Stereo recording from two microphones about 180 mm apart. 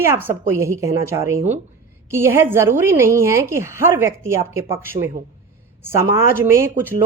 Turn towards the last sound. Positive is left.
turn(degrees=-15)  # may be behind; listen again after turning